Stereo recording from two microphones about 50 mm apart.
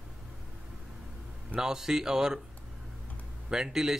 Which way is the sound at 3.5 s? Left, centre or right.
Centre.